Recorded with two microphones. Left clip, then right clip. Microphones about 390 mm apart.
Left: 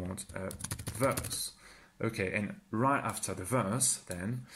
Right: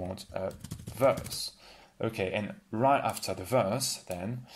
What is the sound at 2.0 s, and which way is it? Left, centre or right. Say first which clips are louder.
Speech: right 2 dB; right.